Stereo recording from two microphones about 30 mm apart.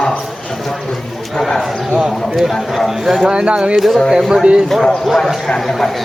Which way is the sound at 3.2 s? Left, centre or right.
Right.